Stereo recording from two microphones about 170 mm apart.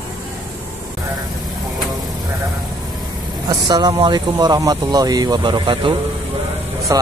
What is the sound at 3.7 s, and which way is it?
Speech, 25° right (ahead or behind).